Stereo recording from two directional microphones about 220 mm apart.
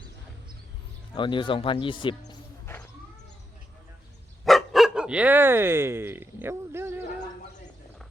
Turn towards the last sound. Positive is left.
turn(degrees=-10)  # may be behind; listen again after turning